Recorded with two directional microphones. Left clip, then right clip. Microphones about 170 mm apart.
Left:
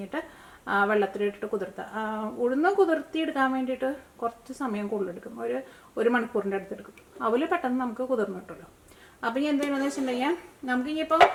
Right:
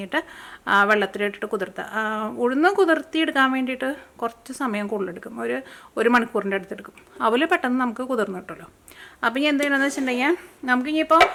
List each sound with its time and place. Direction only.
0.6 s a woman's voice: 35° right (ahead or behind)